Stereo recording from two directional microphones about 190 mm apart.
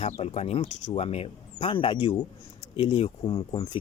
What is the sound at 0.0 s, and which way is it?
Speech, 35° left (ahead or behind).